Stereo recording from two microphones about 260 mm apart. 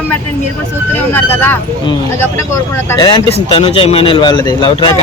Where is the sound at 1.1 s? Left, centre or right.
Centre.